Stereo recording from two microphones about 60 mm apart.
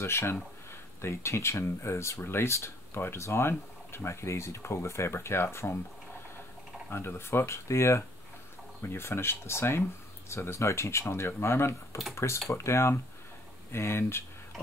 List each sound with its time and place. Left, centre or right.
0.0 s speech: left
6.9 s speech: left
8.8 s speech: left